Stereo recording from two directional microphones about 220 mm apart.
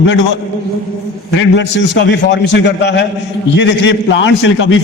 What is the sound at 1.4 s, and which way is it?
A man's voice, 55° left (ahead or behind).